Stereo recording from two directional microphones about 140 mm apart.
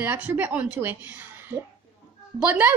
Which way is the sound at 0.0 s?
15° right (ahead or behind).